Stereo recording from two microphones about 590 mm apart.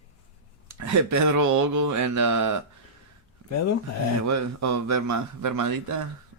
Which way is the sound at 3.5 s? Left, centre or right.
Left.